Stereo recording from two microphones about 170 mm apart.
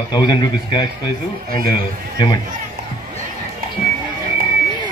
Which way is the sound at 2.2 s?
25° left (ahead or behind).